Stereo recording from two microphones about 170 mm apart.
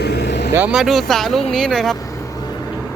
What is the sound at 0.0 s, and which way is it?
Vehicle, 75° left (ahead or behind).